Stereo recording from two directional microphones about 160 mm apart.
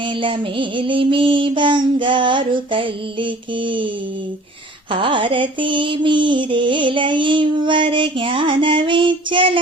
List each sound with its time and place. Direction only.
0.0 s mantra: 30° right (ahead or behind)
4.9 s mantra: 35° right (ahead or behind)